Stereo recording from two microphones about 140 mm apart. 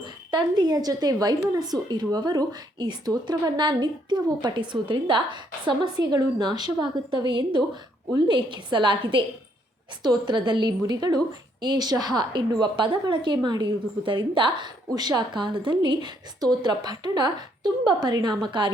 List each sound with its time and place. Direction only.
0.0 s a woman's voice: 30° right (ahead or behind)